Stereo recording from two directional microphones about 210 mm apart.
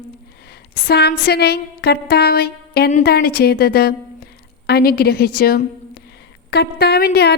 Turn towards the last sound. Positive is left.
turn(degrees=50)  # may be behind; listen again after turning